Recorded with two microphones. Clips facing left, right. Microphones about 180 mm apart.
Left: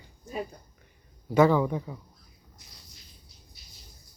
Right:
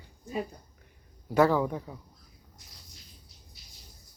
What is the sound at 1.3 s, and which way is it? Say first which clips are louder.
Speech: left 2 dB; centre (ahead or behind).